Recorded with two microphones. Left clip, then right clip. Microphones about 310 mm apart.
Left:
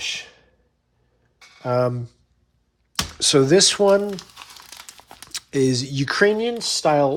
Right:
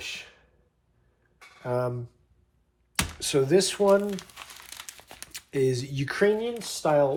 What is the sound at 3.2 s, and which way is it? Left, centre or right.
Speech, centre.